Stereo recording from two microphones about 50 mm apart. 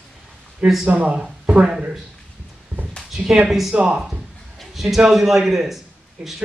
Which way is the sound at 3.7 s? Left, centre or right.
Right.